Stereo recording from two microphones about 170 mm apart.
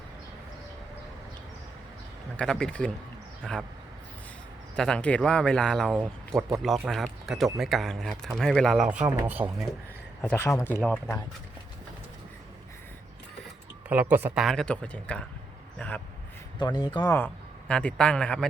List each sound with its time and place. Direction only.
2.3 s speech: 5° left (ahead or behind)
4.8 s speech: 5° left (ahead or behind); by 9.6 s 10° right (ahead or behind)
10.2 s a man's voice: 10° left (ahead or behind)
13.8 s speech: 10° right (ahead or behind)
14.4 s a man's voice: 5° left (ahead or behind)
16.6 s speech: 25° left (ahead or behind)
17.2 s a man's voice: 10° left (ahead or behind)